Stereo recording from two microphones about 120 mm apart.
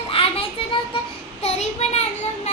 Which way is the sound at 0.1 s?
50° left (ahead or behind).